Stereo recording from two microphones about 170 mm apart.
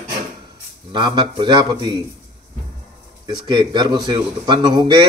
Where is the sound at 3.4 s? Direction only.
25° right (ahead or behind).